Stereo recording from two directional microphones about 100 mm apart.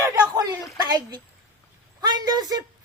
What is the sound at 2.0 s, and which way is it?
Speech, 45° right (ahead or behind).